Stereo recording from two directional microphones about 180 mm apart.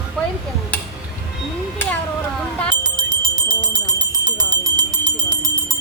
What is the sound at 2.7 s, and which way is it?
Jingle bell, 25° right (ahead or behind).